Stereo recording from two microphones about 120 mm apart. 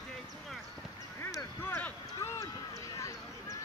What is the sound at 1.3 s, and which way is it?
Speech, 20° left (ahead or behind).